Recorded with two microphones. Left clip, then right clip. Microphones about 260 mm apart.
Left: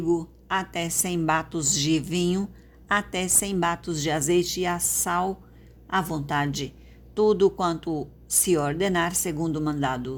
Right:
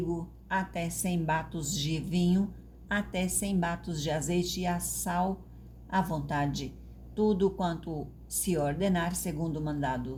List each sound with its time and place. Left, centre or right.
0.1 s a woman's voice: left